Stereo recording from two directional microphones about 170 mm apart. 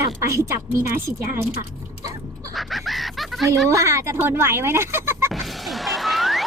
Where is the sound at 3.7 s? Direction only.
20° right (ahead or behind).